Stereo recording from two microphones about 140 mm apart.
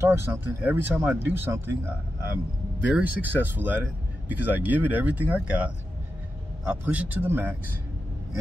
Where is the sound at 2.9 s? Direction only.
10° right (ahead or behind).